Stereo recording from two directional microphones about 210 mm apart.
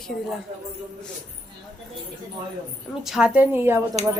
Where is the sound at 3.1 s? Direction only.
5° right (ahead or behind).